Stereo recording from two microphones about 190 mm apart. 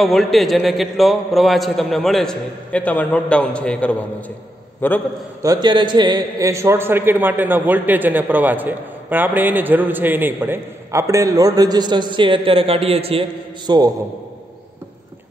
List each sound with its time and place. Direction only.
0.0 s a man's voice: centre (ahead or behind)
5.4 s a man's voice: 20° right (ahead or behind)